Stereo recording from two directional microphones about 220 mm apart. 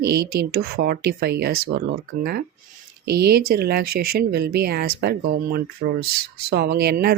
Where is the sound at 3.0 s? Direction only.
45° right (ahead or behind).